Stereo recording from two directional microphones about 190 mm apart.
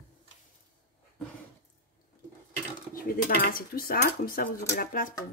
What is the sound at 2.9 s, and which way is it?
Speech, 50° left (ahead or behind).